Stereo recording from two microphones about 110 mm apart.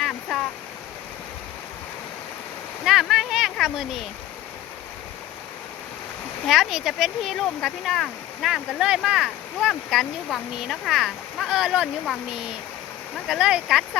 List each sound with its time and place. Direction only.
0.0 s stream: 5° left (ahead or behind)
2.8 s a sound: centre (ahead or behind)
6.5 s speech: 5° right (ahead or behind)